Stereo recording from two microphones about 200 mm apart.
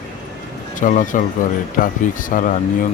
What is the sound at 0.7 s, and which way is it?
Speech, 40° left (ahead or behind).